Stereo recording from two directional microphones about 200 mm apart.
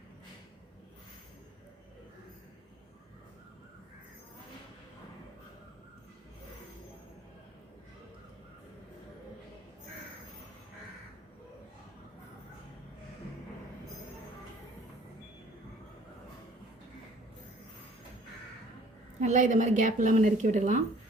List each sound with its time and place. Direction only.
19.2 s a woman's voice: 40° right (ahead or behind)